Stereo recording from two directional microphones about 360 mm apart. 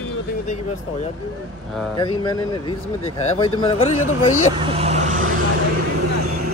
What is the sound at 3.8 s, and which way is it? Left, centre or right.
Speech, left.